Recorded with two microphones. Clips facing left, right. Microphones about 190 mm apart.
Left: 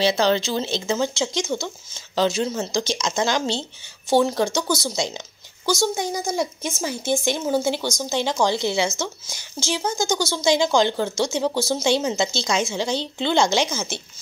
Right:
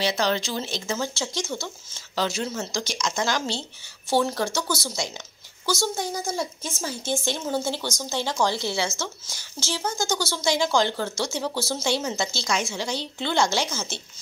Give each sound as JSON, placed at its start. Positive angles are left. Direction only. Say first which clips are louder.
{"t": 0.0, "sound": "a woman's voice", "louder": "left 5 dB", "side_deg": 30}